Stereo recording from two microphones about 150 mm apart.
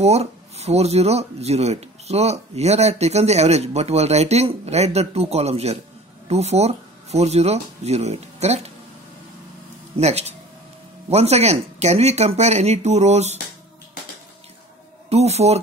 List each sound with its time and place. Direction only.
0.0 s speech: 45° right (ahead or behind)
9.9 s speech: 45° right (ahead or behind)
15.0 s speech: 45° right (ahead or behind)